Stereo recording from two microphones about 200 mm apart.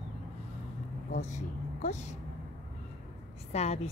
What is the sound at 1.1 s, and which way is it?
A woman's voice, 40° left (ahead or behind).